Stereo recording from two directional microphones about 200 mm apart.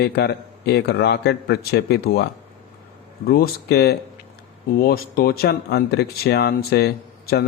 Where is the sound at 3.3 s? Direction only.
55° left (ahead or behind).